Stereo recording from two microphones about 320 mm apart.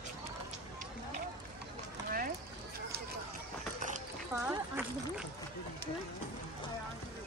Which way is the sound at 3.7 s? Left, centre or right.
Right.